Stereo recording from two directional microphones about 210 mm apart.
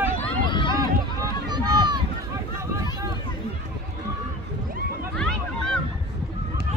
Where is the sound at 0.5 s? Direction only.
20° left (ahead or behind).